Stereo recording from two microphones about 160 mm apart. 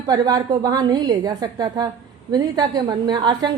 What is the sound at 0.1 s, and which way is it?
A woman's voice, 25° right (ahead or behind).